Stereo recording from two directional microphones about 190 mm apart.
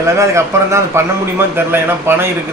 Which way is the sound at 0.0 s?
15° right (ahead or behind).